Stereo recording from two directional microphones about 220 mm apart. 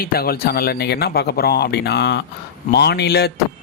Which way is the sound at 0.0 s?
45° left (ahead or behind).